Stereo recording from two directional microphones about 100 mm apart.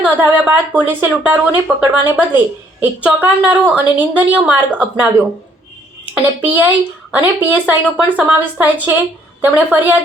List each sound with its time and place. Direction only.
0.0 s a woman's voice: 15° right (ahead or behind)
7.1 s a woman's voice: 15° right (ahead or behind)